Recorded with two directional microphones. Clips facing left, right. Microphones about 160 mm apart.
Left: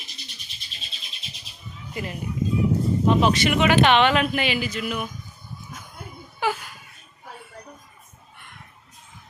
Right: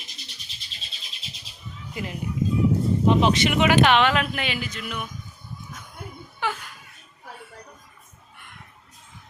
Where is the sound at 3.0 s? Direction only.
20° right (ahead or behind).